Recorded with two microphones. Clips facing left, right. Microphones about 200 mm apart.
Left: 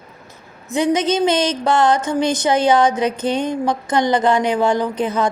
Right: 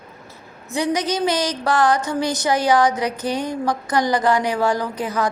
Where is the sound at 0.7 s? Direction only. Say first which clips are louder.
Left 4 dB; 20° left (ahead or behind).